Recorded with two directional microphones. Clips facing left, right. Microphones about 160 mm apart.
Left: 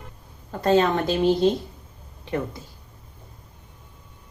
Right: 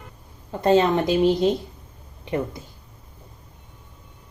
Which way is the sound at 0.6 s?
20° right (ahead or behind).